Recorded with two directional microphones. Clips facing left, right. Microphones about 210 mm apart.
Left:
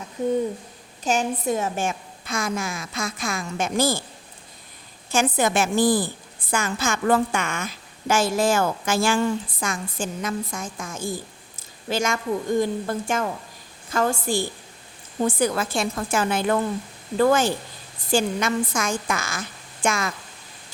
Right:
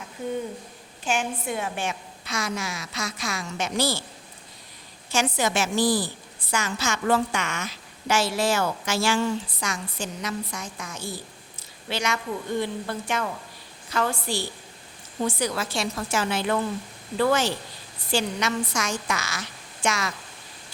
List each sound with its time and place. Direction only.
0.2 s a woman's voice: 40° left (ahead or behind)
5.1 s a woman's voice: 55° left (ahead or behind)